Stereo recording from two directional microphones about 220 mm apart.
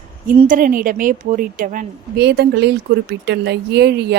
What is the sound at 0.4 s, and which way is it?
A woman's voice, 40° right (ahead or behind).